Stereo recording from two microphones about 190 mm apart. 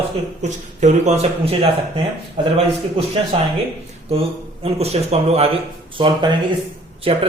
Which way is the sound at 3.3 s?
30° right (ahead or behind).